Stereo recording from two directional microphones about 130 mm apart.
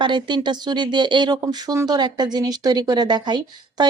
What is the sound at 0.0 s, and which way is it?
Speech, 35° right (ahead or behind).